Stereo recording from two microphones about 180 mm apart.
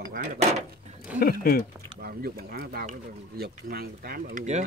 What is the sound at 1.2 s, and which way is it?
Speech, 55° left (ahead or behind).